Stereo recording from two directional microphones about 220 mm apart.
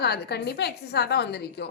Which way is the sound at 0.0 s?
50° left (ahead or behind).